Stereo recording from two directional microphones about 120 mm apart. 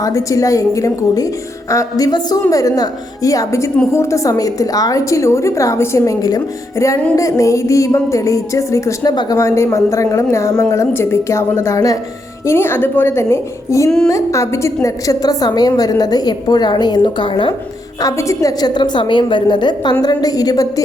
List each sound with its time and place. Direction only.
0.0 s a woman's voice: 30° left (ahead or behind); by 17.5 s 45° left (ahead or behind)
18.0 s a woman's voice: 25° left (ahead or behind)